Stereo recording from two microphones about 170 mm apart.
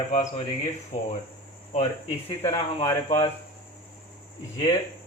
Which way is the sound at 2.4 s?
35° left (ahead or behind).